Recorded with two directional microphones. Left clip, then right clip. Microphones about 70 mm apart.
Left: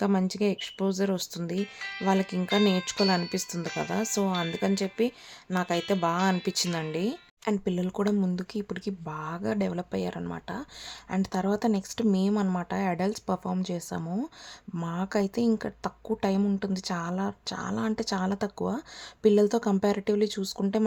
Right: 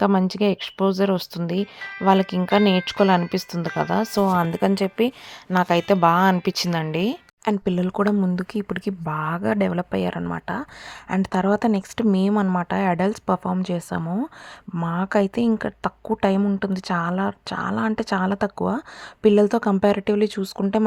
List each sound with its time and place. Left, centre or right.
0.0 s speech: right
4.5 s speech: right
6.4 s speech: right
8.4 s speech: right
11.1 s speech: right
14.0 s speech: centre
14.9 s speech: right